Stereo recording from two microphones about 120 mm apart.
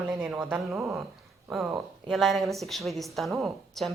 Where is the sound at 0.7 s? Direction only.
25° right (ahead or behind).